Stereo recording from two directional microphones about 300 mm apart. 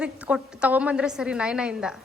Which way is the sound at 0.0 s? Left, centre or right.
Centre.